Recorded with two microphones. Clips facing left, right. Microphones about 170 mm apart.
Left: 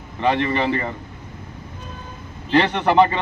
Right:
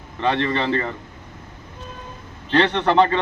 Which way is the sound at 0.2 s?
15° left (ahead or behind).